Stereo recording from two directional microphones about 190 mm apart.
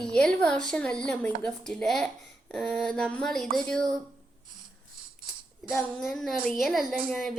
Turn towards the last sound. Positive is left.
turn(degrees=0)  # may be behind; listen again after turning